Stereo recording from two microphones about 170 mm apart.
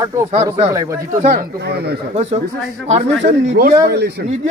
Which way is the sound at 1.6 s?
70° right (ahead or behind).